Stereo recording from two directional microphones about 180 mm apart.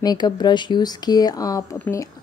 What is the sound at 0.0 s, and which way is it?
Speech, 20° left (ahead or behind).